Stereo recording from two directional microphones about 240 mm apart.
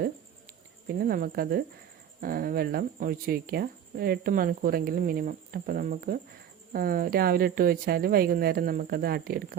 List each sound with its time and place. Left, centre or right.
0.9 s speech: right